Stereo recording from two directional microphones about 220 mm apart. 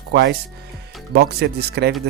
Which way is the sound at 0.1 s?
50° right (ahead or behind).